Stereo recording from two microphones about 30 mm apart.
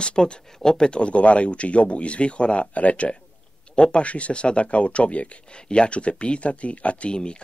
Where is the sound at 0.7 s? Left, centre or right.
Left.